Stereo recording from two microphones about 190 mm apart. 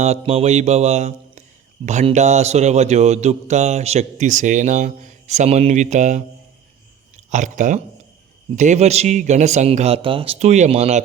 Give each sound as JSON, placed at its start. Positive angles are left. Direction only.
{"t": 0.0, "sound": "speech", "side_deg": -35}
{"t": 7.3, "sound": "speech", "side_deg": -40}